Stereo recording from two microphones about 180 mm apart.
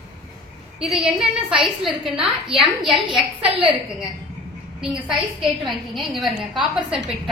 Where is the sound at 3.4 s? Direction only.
30° right (ahead or behind).